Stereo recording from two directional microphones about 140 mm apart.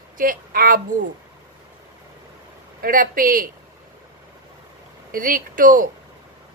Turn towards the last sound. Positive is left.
turn(degrees=-75)  # may be behind; listen again after turning